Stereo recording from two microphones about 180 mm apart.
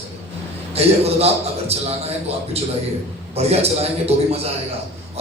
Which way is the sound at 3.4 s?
35° right (ahead or behind).